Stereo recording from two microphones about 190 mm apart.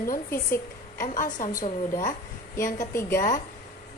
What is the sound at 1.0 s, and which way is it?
A woman's voice, 45° left (ahead or behind).